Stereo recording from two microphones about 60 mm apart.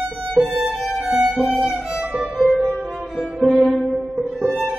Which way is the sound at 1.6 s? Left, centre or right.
Centre.